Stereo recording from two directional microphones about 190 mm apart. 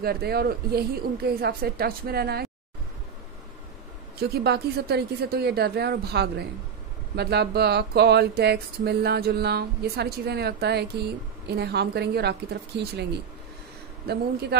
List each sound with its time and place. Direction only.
0.0 s speech: 55° right (ahead or behind)
4.2 s a woman's voice: 60° right (ahead or behind)